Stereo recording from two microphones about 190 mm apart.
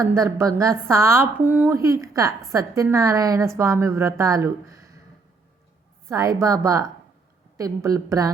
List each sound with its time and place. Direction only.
0.0 s a woman's voice: 15° right (ahead or behind)
6.1 s a woman's voice: 15° right (ahead or behind)